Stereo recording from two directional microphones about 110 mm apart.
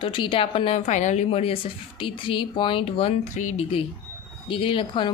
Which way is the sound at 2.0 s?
50° left (ahead or behind).